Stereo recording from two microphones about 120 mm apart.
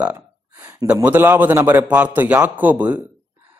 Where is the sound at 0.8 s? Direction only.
15° right (ahead or behind).